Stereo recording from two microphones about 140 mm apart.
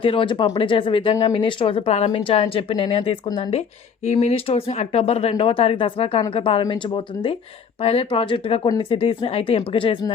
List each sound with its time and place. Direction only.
0.0 s a woman's voice: 40° left (ahead or behind)
4.0 s a woman's voice: 55° left (ahead or behind); by 10.1 s 40° left (ahead or behind)